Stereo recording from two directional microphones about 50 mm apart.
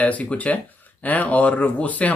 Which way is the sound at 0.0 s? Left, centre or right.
Left.